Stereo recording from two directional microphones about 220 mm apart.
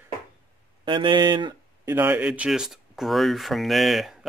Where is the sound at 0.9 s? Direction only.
20° right (ahead or behind).